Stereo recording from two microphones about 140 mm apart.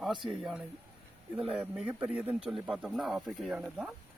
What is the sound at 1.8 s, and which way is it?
Speech, 10° right (ahead or behind).